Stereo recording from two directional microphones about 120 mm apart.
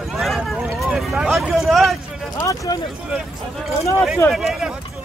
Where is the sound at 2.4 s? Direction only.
35° left (ahead or behind).